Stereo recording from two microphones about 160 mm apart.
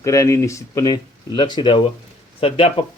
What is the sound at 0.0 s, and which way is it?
Speech, 20° left (ahead or behind).